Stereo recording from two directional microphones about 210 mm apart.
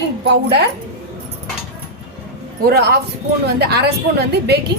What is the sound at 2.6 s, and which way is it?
A woman's voice, 50° right (ahead or behind).